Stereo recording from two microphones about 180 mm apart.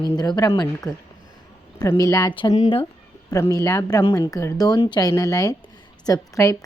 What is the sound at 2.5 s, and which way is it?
Speech, 35° left (ahead or behind).